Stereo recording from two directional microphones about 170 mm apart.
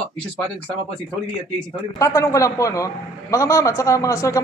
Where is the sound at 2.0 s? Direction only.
20° left (ahead or behind).